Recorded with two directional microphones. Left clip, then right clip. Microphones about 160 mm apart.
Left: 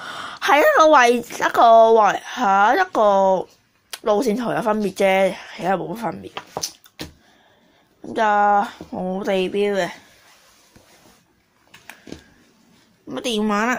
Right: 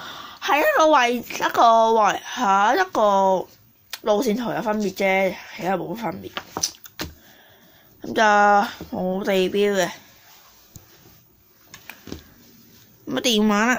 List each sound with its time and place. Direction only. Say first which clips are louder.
0.0 s a sound: left 5 dB; 15° left (ahead or behind)
1.4 s speech: left 4 dB; 10° left (ahead or behind)
8.0 s speech: right 1 dB; 10° right (ahead or behind)
13.0 s a woman's voice: right 3 dB; 15° right (ahead or behind)